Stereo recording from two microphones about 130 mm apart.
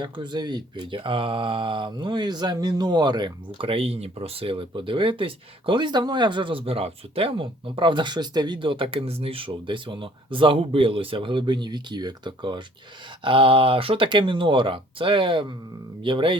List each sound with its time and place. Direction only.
0.0 s speech: 35° right (ahead or behind)